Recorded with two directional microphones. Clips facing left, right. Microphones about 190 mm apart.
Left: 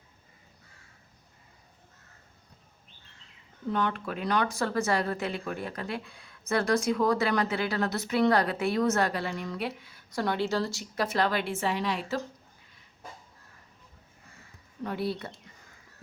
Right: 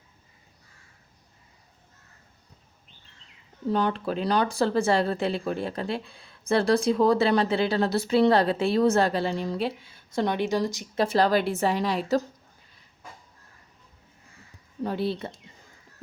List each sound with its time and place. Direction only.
3.7 s speech: 35° right (ahead or behind); by 11.0 s 15° right (ahead or behind)
11.0 s a woman's voice: 35° right (ahead or behind)
14.8 s speech: 25° right (ahead or behind)